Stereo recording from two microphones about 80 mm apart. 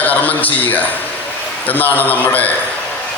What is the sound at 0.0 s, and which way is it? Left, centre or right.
A man's voice, centre.